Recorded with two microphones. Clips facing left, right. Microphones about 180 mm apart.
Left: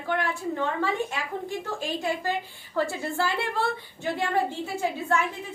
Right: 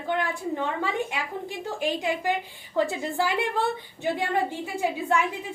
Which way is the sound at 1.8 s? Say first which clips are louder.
Right 5 dB; 15° right (ahead or behind).